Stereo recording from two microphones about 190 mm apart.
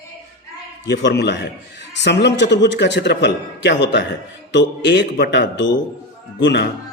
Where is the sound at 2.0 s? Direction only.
65° left (ahead or behind).